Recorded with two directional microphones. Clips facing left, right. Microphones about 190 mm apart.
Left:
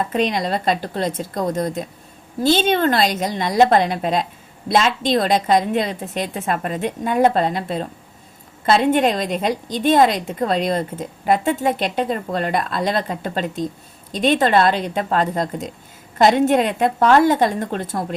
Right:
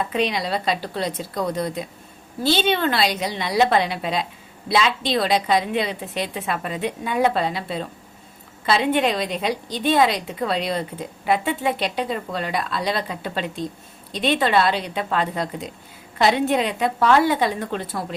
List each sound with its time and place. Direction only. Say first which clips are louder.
0.0 s a woman's voice: left 3 dB; 45° left (ahead or behind)